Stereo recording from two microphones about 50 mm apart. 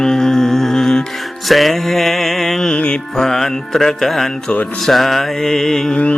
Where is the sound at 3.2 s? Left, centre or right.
Centre.